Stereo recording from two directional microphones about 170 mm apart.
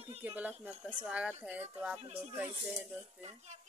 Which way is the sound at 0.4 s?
10° right (ahead or behind).